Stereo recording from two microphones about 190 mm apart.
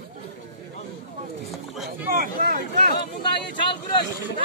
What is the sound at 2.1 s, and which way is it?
Speech, 45° right (ahead or behind).